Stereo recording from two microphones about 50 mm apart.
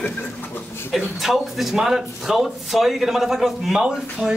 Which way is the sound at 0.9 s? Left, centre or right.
Centre.